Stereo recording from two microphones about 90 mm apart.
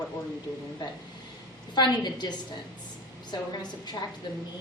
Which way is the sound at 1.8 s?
55° left (ahead or behind).